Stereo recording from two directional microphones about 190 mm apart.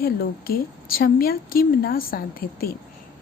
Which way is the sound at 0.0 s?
50° left (ahead or behind).